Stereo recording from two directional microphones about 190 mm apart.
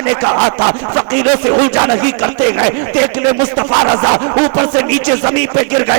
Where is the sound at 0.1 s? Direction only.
15° right (ahead or behind).